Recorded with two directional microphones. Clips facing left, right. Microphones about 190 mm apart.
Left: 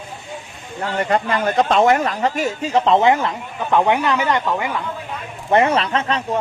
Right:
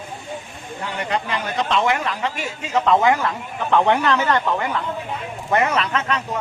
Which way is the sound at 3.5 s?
10° left (ahead or behind).